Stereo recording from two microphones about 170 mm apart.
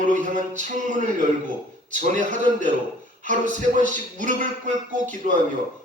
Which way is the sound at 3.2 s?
50° right (ahead or behind).